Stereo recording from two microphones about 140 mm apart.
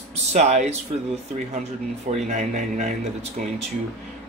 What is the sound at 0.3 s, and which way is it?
Speech, 55° right (ahead or behind).